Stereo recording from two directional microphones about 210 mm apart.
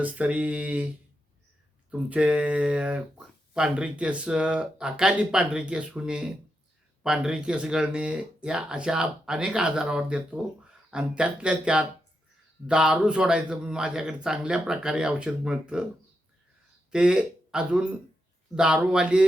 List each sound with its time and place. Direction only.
0.0 s speech: 5° right (ahead or behind)
1.9 s speech: 5° right (ahead or behind)
16.9 s speech: 5° right (ahead or behind)